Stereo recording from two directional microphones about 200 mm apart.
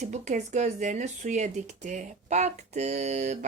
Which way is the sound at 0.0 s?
35° right (ahead or behind).